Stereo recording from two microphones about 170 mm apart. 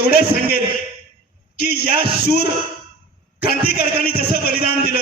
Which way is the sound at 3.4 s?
65° left (ahead or behind).